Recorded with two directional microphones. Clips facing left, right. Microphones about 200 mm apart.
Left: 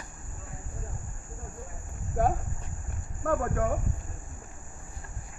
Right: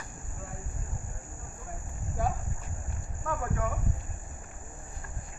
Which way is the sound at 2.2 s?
55° left (ahead or behind).